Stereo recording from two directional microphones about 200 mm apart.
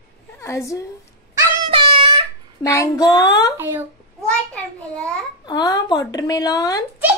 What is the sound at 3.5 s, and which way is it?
Speech, 10° right (ahead or behind).